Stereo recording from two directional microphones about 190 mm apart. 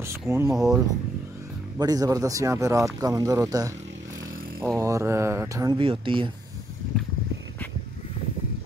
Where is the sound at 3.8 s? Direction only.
75° right (ahead or behind).